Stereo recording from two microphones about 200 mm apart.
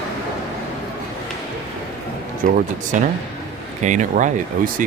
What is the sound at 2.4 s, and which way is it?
Speech, 40° right (ahead or behind).